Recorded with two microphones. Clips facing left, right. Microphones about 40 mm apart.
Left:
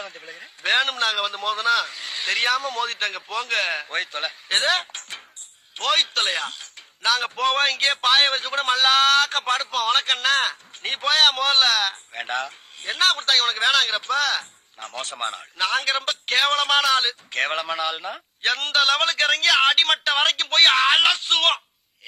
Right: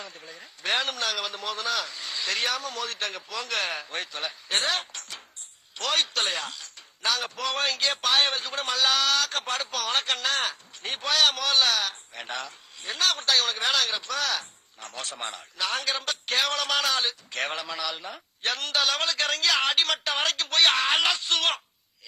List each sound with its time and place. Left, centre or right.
0.0 s a man's voice: left